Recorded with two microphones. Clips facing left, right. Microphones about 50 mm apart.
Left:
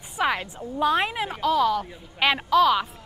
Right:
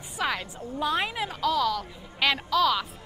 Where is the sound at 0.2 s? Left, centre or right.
Centre.